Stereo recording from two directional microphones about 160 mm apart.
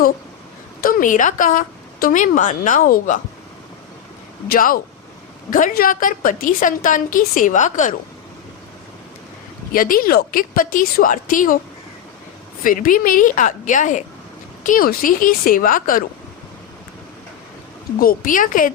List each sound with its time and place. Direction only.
0.8 s a woman's voice: 60° left (ahead or behind)
4.5 s a woman's voice: 60° left (ahead or behind)
9.7 s a woman's voice: 60° left (ahead or behind)
12.6 s a woman's voice: 55° left (ahead or behind)
18.0 s a woman's voice: 60° left (ahead or behind)